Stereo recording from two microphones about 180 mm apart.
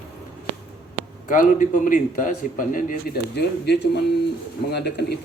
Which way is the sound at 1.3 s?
45° left (ahead or behind).